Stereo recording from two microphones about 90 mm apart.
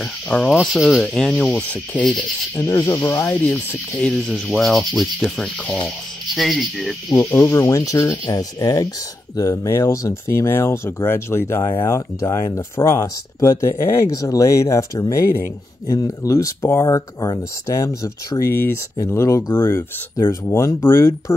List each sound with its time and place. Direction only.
0.0 s insect: 10° left (ahead or behind)
0.6 s speech: centre (ahead or behind)
1.3 s insect: 10° left (ahead or behind)
2.6 s speech: 30° left (ahead or behind); by 5.0 s centre (ahead or behind)
5.2 s insect: 5° left (ahead or behind)
6.3 s speech: centre (ahead or behind)
7.2 s speech: 25° left (ahead or behind)
19.4 s speech: 55° left (ahead or behind)
20.2 s speech: 35° left (ahead or behind)